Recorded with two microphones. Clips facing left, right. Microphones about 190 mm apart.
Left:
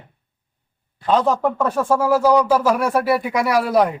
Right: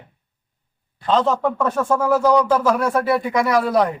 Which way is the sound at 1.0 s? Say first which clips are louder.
Left 1 dB; 10° left (ahead or behind).